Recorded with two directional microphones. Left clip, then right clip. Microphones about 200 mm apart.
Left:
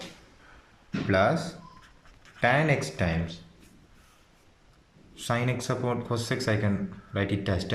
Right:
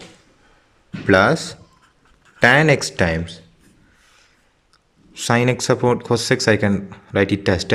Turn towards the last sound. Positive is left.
turn(degrees=-45)  # may be behind; listen again after turning